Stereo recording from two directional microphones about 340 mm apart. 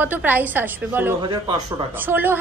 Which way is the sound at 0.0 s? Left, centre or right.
Centre.